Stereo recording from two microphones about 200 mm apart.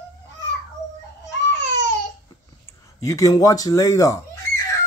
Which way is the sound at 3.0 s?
15° left (ahead or behind).